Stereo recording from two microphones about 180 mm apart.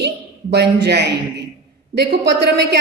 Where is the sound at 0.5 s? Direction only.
70° right (ahead or behind).